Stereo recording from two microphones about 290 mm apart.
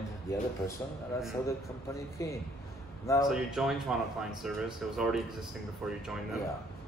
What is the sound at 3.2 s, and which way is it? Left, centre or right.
Speech, centre.